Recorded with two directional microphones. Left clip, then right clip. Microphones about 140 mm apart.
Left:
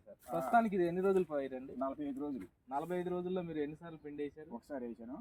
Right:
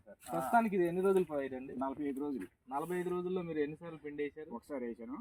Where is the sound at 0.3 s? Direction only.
10° left (ahead or behind).